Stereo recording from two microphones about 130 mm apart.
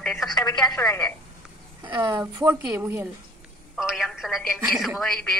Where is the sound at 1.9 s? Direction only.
40° right (ahead or behind).